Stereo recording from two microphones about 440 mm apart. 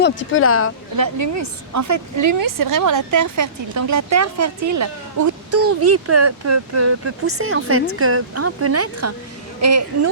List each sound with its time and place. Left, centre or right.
0.0 s speech: left
0.9 s a woman's voice: right